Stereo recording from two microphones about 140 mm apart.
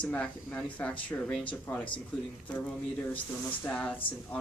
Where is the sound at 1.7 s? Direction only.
20° left (ahead or behind).